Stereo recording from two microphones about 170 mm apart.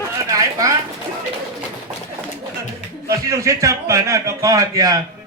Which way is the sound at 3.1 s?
20° right (ahead or behind).